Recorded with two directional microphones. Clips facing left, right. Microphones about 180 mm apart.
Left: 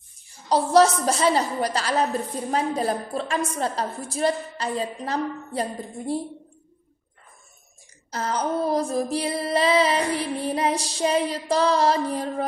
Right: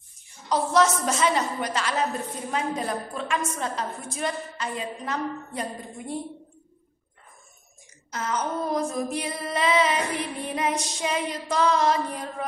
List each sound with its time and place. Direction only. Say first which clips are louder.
0.5 s female singing: left 4 dB; 35° left (ahead or behind)
8.1 s female singing: left 3 dB; 35° left (ahead or behind)